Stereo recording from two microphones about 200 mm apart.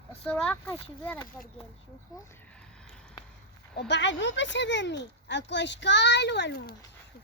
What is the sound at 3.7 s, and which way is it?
Speech, 60° left (ahead or behind).